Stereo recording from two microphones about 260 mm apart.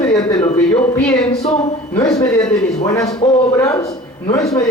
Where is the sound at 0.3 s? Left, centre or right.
Centre.